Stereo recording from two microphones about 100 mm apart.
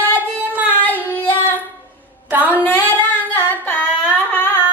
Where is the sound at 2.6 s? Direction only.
15° left (ahead or behind).